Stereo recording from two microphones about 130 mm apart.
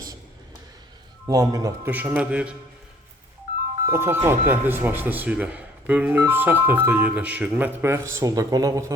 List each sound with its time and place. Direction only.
1.3 s speech: 30° right (ahead or behind)
1.8 s speech: 15° right (ahead or behind)
3.8 s speech: 20° right (ahead or behind)